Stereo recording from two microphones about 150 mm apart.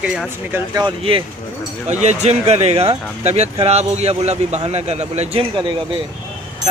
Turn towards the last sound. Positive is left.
turn(degrees=-35)  # may be behind; listen again after turning